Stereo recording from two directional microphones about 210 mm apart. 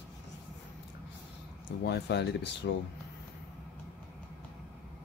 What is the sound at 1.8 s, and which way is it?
Speech, 50° left (ahead or behind).